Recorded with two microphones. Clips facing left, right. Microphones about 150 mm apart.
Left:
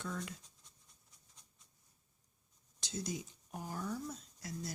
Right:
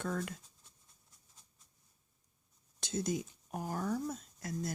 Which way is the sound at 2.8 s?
50° right (ahead or behind).